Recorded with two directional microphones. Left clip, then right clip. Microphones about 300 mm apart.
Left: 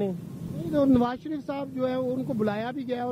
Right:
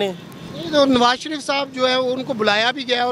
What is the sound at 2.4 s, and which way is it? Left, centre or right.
Speech, centre.